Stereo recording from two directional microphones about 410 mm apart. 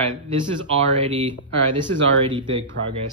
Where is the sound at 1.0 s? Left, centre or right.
Centre.